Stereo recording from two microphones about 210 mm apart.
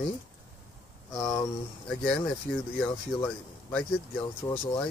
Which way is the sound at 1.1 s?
15° left (ahead or behind).